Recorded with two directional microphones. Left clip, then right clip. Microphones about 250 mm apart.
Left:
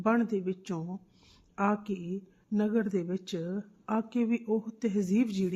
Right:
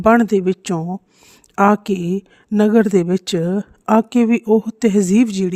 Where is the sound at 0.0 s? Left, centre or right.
Right.